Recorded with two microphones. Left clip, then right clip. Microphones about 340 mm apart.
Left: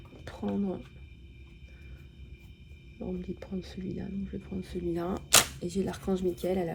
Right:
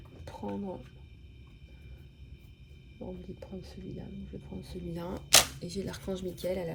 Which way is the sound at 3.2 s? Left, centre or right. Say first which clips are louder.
Left 5 dB; left.